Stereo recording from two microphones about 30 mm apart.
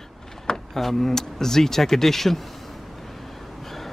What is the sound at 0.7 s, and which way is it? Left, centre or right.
Speech, centre.